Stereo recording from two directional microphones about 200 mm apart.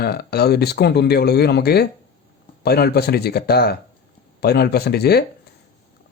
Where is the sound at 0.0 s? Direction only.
50° left (ahead or behind).